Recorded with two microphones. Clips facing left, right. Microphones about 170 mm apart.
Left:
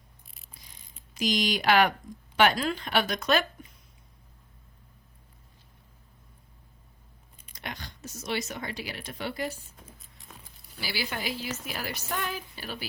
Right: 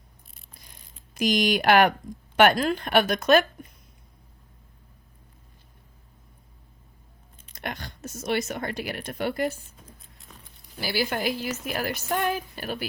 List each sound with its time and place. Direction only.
1.1 s speech: 50° right (ahead or behind)
7.5 s speech: 55° right (ahead or behind)
9.8 s music: centre (ahead or behind)
10.8 s speech: 50° right (ahead or behind)